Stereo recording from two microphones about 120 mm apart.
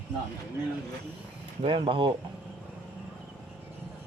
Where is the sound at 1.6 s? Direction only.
45° right (ahead or behind).